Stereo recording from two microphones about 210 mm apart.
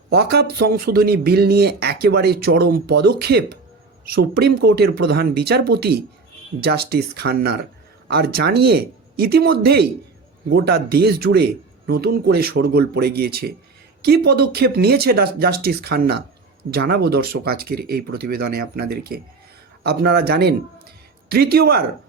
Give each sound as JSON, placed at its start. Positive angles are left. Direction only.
{"t": 0.1, "sound": "speech", "side_deg": -50}